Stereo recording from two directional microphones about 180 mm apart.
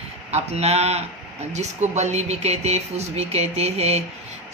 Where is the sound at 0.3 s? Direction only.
35° right (ahead or behind).